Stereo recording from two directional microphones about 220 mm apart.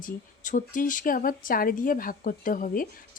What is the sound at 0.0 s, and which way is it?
Speech, 35° left (ahead or behind).